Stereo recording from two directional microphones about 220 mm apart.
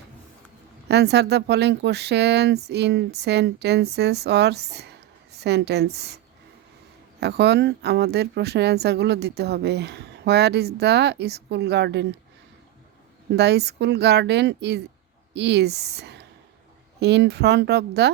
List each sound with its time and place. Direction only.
0.9 s speech: 50° right (ahead or behind)
7.2 s speech: 50° right (ahead or behind)
13.3 s speech: 50° right (ahead or behind)